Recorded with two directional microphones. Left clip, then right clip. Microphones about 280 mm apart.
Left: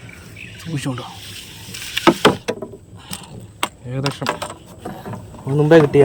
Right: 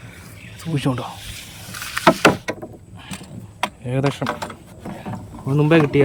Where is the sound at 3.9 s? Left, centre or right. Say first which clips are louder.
Right 3 dB; centre.